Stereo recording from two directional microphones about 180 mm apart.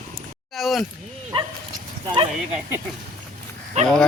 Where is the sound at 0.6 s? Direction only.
Centre (ahead or behind).